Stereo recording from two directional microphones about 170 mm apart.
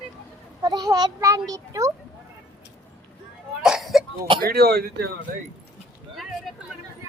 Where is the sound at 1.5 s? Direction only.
20° right (ahead or behind).